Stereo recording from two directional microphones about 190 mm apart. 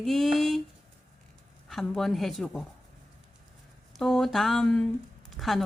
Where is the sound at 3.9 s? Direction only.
Centre (ahead or behind).